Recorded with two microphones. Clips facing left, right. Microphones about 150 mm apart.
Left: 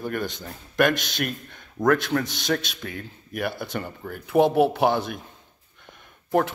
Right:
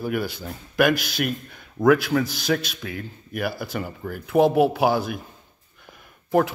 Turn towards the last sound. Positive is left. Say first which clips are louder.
# right 2 dB
turn(degrees=0)  # may be behind; listen again after turning